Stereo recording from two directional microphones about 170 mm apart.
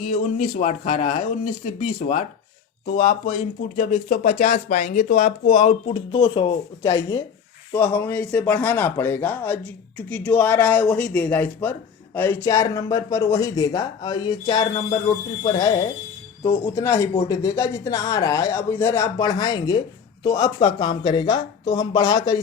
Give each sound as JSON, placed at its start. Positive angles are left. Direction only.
{"t": 0.1, "sound": "speech", "side_deg": 45}
{"t": 7.7, "sound": "speech", "side_deg": 10}